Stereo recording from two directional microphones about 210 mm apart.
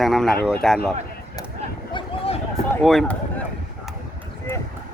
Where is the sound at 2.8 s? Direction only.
Centre (ahead or behind).